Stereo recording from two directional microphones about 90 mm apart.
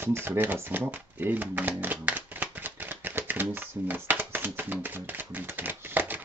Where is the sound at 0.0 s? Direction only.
25° right (ahead or behind).